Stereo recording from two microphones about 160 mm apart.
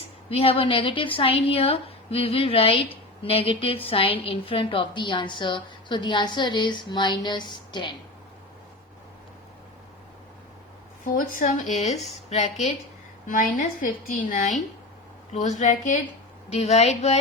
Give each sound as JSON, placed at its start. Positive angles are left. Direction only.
{"t": 0.3, "sound": "a woman's voice", "side_deg": 35}
{"t": 11.0, "sound": "speech", "side_deg": 60}
{"t": 13.2, "sound": "a woman's voice", "side_deg": 60}